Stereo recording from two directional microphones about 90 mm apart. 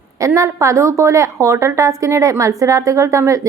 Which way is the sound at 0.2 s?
35° right (ahead or behind).